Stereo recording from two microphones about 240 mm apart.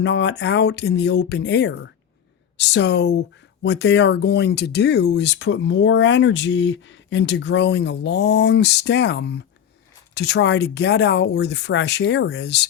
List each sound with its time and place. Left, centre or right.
0.0 s speech: left